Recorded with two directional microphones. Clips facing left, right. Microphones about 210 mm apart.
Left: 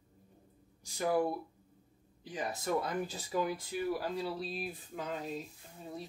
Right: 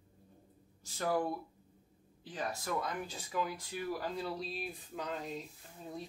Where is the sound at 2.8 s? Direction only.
35° left (ahead or behind).